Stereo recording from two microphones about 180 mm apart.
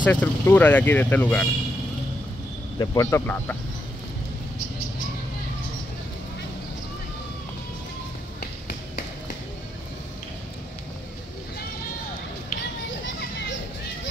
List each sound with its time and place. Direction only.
0.0 s speech: 10° left (ahead or behind)
2.8 s speech: 15° left (ahead or behind)